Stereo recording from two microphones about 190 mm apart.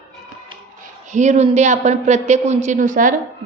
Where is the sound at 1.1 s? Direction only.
40° right (ahead or behind).